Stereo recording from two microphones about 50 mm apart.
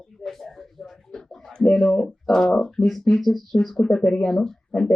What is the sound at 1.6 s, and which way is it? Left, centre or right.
Speech, centre.